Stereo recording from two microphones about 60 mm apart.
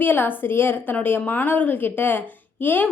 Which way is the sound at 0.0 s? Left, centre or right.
Left.